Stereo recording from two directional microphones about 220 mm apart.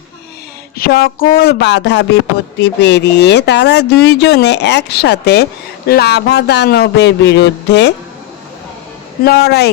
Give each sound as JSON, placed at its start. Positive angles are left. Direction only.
{"t": 0.8, "sound": "speech", "side_deg": 45}
{"t": 9.2, "sound": "speech", "side_deg": 45}